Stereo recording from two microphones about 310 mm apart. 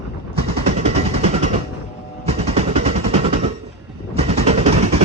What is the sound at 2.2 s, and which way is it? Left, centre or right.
Music, centre.